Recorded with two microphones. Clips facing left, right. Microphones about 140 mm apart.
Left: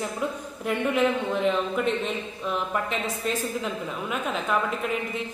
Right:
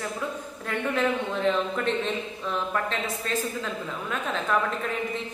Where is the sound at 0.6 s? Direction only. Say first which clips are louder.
Left 3 dB; 10° left (ahead or behind).